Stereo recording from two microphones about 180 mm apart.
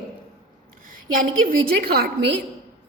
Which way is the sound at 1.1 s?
50° right (ahead or behind).